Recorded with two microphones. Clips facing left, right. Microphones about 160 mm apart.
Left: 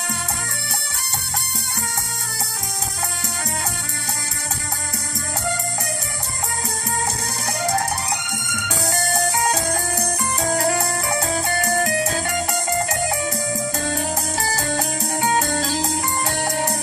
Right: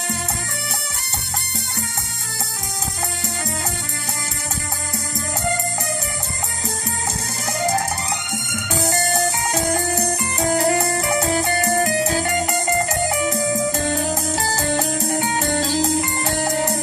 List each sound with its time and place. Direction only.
8.3 s music: 25° right (ahead or behind)